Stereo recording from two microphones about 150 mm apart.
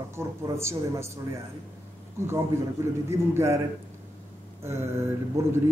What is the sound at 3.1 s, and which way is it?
Speech, 15° right (ahead or behind).